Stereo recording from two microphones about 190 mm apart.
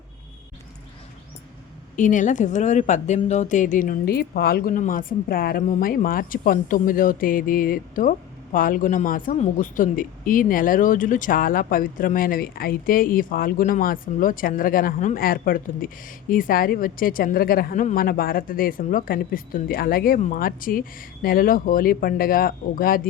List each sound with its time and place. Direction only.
2.0 s speech: 40° left (ahead or behind)